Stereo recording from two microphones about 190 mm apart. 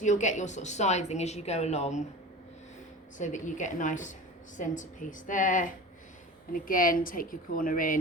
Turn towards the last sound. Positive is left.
turn(degrees=45)  # may be behind; listen again after turning